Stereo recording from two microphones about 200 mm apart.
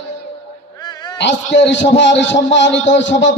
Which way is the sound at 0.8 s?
20° left (ahead or behind).